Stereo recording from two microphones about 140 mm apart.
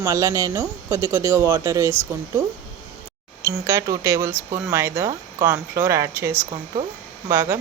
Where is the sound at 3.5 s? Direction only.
20° right (ahead or behind).